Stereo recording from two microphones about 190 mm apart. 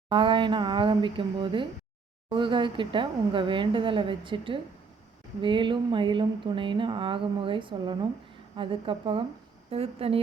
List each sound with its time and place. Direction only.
0.1 s speech: 25° right (ahead or behind)